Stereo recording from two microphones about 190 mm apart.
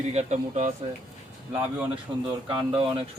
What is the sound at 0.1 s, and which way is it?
Speech, 35° right (ahead or behind).